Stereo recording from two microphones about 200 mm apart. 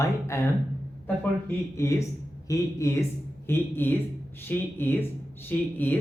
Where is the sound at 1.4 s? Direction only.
15° left (ahead or behind).